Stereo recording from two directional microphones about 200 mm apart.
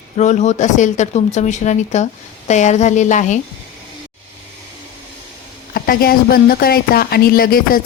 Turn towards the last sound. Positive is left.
turn(degrees=45)  # may be behind; listen again after turning